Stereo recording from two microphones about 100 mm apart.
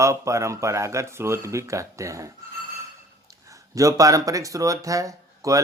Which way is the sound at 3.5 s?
35° right (ahead or behind).